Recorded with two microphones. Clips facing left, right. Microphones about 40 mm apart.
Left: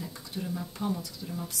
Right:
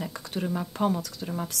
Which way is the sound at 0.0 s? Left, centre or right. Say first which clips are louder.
Right 5 dB; right.